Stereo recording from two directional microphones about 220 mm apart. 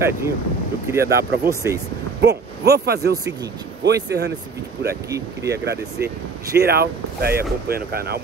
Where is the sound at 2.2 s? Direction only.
45° right (ahead or behind).